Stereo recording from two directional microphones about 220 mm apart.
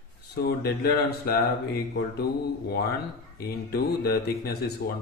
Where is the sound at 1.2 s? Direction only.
45° left (ahead or behind).